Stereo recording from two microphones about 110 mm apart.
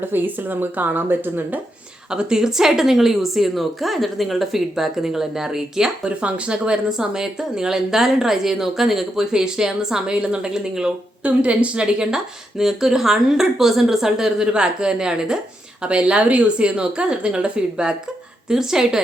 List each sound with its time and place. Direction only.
0.1 s a woman's voice: 20° right (ahead or behind)
2.0 s a woman's voice: 5° right (ahead or behind)